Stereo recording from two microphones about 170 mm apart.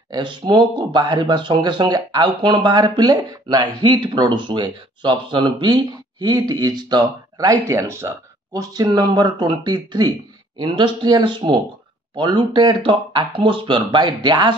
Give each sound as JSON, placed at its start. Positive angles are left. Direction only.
{"t": 0.1, "sound": "speech", "side_deg": -25}